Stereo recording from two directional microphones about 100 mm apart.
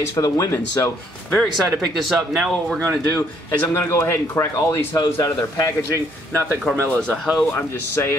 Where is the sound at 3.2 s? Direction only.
25° left (ahead or behind).